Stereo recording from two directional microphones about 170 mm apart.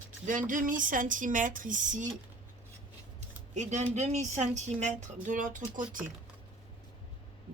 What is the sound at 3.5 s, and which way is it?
Speech, 45° right (ahead or behind).